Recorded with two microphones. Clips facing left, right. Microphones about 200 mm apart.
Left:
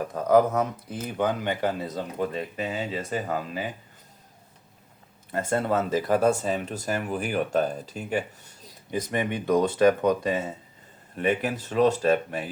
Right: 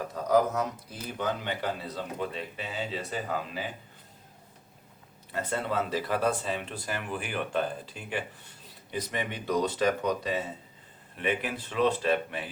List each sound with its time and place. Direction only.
0.1 s speech: 55° left (ahead or behind)
5.3 s speech: 45° left (ahead or behind)